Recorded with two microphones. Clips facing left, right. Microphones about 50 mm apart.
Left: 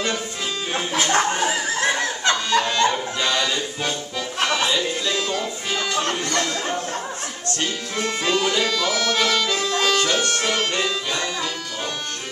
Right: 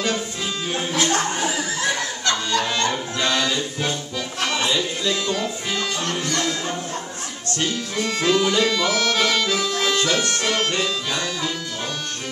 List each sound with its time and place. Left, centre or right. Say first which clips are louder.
0.7 s music: even; centre
1.1 s snicker: left 2 dB; left
2.8 s music: left 2 dB; centre
7.9 s music: right 2 dB; centre